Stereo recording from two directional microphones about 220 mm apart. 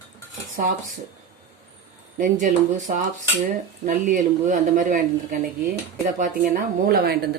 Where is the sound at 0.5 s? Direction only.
40° right (ahead or behind).